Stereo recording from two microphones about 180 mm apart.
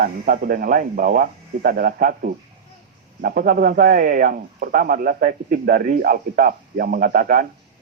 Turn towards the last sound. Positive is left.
turn(degrees=-50)  # may be behind; listen again after turning